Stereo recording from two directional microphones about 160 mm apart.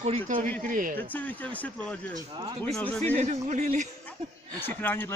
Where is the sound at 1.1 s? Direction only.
10° left (ahead or behind).